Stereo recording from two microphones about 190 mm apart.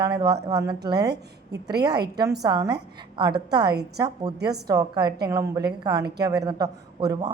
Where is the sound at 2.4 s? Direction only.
20° right (ahead or behind).